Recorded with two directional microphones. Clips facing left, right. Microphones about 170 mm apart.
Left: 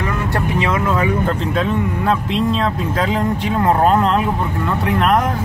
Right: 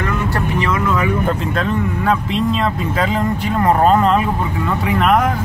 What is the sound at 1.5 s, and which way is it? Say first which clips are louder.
Speech: left 1 dB; centre (ahead or behind).